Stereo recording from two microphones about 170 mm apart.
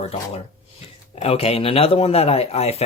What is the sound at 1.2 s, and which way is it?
Speech, 35° left (ahead or behind).